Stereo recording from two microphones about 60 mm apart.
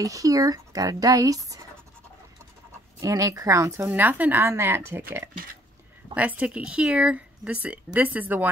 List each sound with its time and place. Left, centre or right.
0.0 s speech: right
3.0 s speech: right
3.7 s speech: right
4.5 s speech: right
6.1 s speech: right